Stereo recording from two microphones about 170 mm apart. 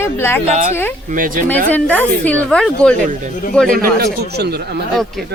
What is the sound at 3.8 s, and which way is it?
Speech, 70° right (ahead or behind).